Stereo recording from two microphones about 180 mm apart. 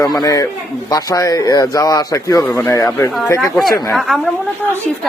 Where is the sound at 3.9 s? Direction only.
Centre (ahead or behind).